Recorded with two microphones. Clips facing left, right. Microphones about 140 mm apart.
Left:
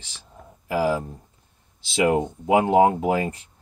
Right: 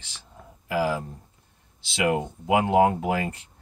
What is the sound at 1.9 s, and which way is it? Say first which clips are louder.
Speech: left 4 dB; 35° left (ahead or behind).